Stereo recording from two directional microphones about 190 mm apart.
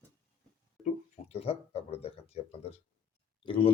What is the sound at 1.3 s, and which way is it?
Speech, 30° left (ahead or behind).